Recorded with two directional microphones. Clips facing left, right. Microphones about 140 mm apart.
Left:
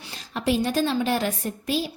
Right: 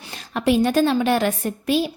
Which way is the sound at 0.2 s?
60° right (ahead or behind).